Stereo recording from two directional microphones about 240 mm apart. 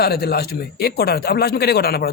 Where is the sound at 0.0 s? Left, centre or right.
Left.